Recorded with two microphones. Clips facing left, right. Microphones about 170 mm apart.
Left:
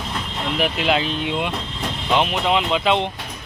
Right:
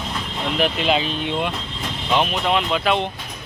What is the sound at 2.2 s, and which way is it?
Speech, 15° left (ahead or behind).